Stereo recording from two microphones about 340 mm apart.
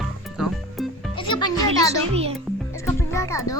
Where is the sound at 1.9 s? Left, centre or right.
Centre.